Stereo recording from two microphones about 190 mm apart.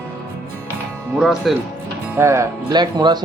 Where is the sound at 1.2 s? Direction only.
Centre (ahead or behind).